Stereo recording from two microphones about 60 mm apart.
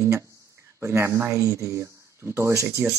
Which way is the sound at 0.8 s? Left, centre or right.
Right.